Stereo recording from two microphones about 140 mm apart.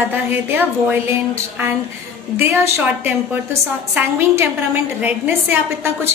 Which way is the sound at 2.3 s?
15° right (ahead or behind).